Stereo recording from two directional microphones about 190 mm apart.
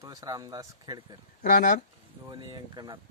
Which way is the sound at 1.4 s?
45° left (ahead or behind).